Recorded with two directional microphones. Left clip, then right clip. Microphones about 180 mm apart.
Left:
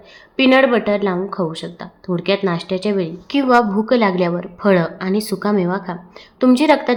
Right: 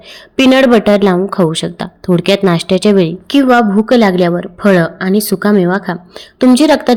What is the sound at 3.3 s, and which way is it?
A woman's voice, 30° right (ahead or behind).